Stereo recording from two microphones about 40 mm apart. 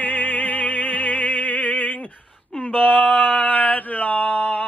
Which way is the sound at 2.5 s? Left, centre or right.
Left.